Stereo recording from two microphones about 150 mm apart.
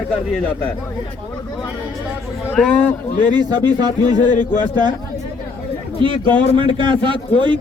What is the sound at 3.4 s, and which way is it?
Speech, 25° right (ahead or behind).